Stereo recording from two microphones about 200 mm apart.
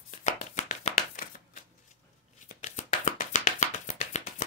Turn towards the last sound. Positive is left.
turn(degrees=35)  # may be behind; listen again after turning